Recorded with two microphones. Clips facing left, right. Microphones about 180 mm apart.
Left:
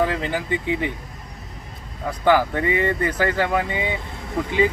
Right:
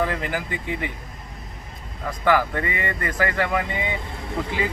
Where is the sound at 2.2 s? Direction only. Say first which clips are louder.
Left 3 dB; 25° left (ahead or behind).